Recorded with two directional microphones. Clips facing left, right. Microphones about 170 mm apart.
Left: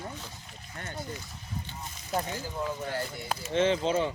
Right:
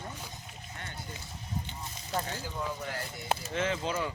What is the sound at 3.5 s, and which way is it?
Speech, 25° left (ahead or behind).